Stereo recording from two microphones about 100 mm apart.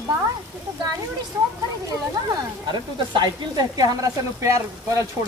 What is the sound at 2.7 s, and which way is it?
Speech, 50° right (ahead or behind).